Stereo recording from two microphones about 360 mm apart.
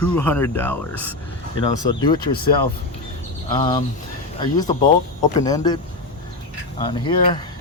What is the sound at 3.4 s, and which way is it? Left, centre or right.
Speech, centre.